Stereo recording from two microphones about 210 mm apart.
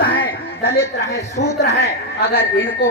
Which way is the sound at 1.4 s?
50° left (ahead or behind).